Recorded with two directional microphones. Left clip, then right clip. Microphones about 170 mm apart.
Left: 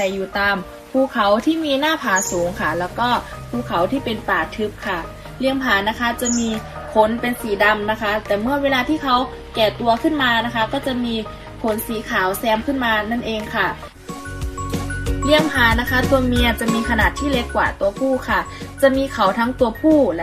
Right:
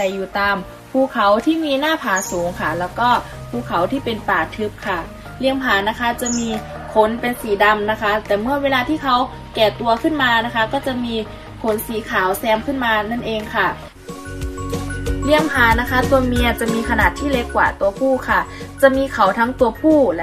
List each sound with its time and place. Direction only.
0.0 s a woman's voice: 5° right (ahead or behind)
14.7 s music: centre (ahead or behind)
15.6 s a woman's voice: centre (ahead or behind)
18.3 s a woman's voice: 15° right (ahead or behind)
18.9 s a woman's voice: centre (ahead or behind)